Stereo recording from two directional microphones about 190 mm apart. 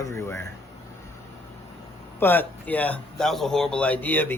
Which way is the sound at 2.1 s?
10° left (ahead or behind).